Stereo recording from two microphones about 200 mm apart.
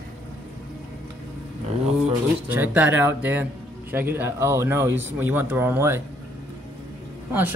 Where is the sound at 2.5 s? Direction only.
10° right (ahead or behind).